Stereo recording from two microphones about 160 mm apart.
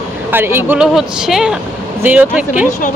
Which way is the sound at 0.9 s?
Centre (ahead or behind).